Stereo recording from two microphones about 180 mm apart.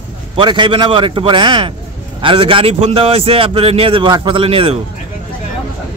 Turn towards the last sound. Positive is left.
turn(degrees=-30)  # may be behind; listen again after turning